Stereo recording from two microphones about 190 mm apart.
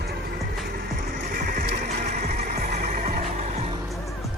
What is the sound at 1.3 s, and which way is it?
Neigh, 50° right (ahead or behind).